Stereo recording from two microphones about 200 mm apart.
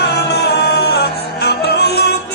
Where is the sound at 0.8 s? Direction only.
55° left (ahead or behind).